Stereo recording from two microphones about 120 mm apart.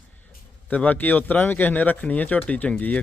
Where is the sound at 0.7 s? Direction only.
15° left (ahead or behind).